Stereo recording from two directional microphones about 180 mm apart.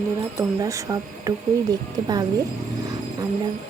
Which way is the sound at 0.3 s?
15° right (ahead or behind).